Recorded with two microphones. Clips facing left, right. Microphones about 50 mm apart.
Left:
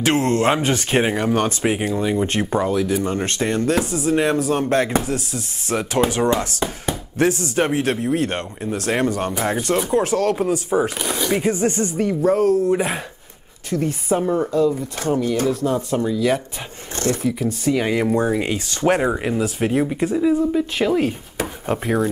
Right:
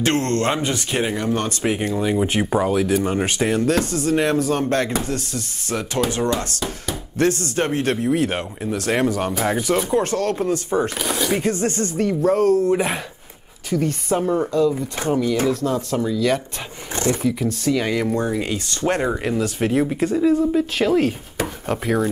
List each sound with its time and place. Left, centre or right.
0.0 s speech: centre
0.6 s speech: left
0.9 s speech: left; by 5.8 s centre
5.8 s speech: centre
11.4 s speech: centre
12.0 s speech: centre
14.5 s speech: centre
15.0 s speech: right
15.6 s speech: centre
16.9 s speech: right
17.2 s speech: centre; by 18.9 s left
18.9 s speech: centre